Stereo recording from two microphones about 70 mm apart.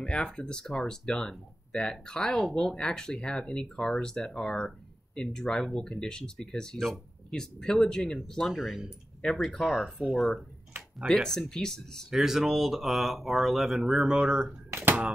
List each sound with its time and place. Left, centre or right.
0.0 s speech: centre
9.2 s speech: centre
9.7 s speech: centre
12.1 s speech: centre
14.7 s a sound: right